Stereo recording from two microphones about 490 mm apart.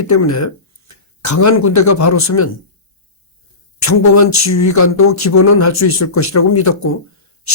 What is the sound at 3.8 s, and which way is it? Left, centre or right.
Speech, left.